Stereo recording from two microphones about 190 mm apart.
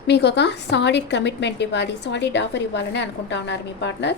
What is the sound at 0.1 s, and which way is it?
A woman's voice, 65° left (ahead or behind).